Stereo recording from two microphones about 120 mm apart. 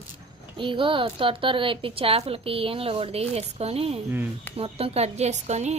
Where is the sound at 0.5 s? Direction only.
45° right (ahead or behind).